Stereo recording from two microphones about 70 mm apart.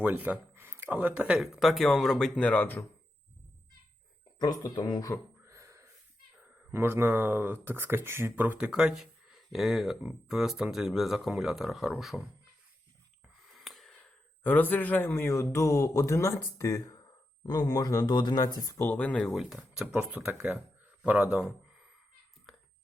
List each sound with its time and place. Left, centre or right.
0.5 s a sound: right
0.9 s speech: right
1.4 s speech: centre
2.4 s speech: left
4.6 s speech: left
5.5 s gasp: right
6.7 s speech: right
8.5 s speech: centre
13.5 s a sound: centre
14.0 s a man's voice: left
17.4 s speech: left
18.8 s speech: left
19.3 s speech: centre